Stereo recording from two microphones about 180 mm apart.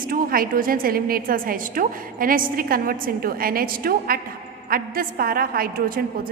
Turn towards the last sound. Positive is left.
turn(degrees=-55)  # may be behind; listen again after turning